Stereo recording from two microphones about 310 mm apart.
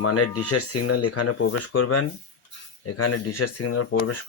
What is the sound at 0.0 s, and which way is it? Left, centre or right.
Speech, left.